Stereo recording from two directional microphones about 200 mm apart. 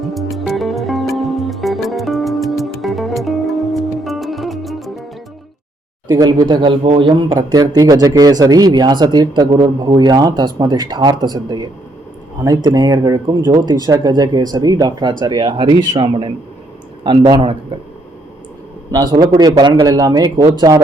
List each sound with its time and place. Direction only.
0.0 s music: centre (ahead or behind)
6.1 s speech: 20° right (ahead or behind)
18.9 s speech: 20° right (ahead or behind)